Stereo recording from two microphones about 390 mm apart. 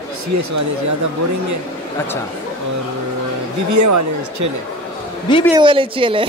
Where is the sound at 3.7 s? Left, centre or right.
Right.